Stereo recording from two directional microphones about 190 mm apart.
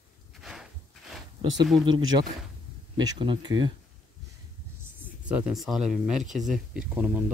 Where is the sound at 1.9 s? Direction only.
20° right (ahead or behind).